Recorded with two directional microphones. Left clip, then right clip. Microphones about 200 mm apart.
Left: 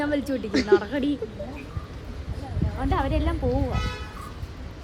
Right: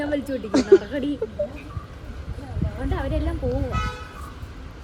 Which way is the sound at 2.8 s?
10° left (ahead or behind).